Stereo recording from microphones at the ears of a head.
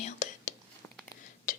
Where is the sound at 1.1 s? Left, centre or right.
Left.